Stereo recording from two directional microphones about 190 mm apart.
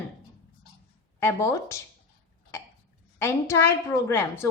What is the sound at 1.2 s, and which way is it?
Speech, 15° left (ahead or behind).